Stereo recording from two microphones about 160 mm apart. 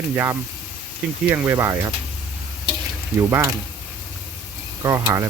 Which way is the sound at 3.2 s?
15° right (ahead or behind).